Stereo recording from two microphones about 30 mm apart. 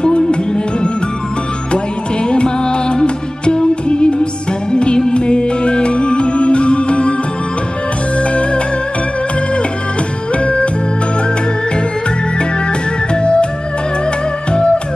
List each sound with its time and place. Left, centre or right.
0.0 s music: left
2.2 s music: left
8.2 s music: left
10.3 s music: left
13.1 s music: left
14.5 s music: left